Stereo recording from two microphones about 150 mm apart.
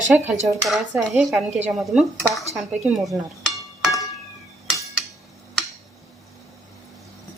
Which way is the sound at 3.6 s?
25° left (ahead or behind).